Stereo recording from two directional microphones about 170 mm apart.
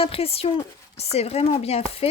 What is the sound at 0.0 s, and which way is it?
Speech, 35° left (ahead or behind).